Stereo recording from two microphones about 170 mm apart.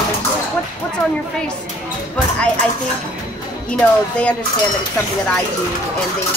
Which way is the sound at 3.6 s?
5° left (ahead or behind).